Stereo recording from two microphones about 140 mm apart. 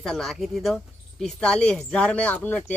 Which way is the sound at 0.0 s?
5° left (ahead or behind).